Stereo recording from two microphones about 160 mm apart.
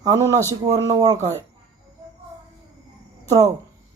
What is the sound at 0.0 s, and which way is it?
A man's voice, 20° right (ahead or behind).